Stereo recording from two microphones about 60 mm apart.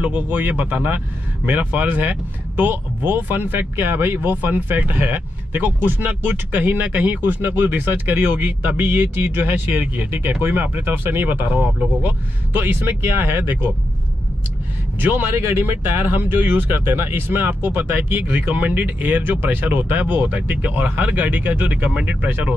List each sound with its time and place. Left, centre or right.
0.0 s speech: right
15.0 s speech: right